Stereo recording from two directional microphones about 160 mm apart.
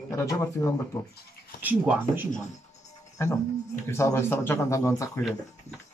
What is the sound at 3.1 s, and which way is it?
Speech, 20° left (ahead or behind).